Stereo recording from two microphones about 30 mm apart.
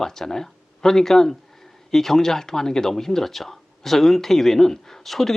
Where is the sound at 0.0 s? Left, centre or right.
Centre.